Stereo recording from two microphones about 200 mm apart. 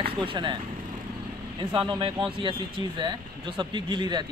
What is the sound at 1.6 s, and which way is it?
Speech, 25° right (ahead or behind).